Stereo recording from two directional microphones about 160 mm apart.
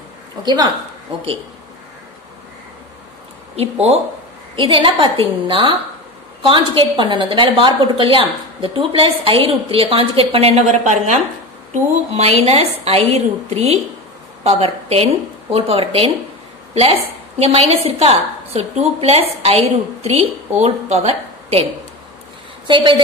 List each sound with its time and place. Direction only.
0.4 s a woman's voice: 25° right (ahead or behind)
3.5 s a woman's voice: 40° right (ahead or behind)
22.7 s a woman's voice: 30° right (ahead or behind)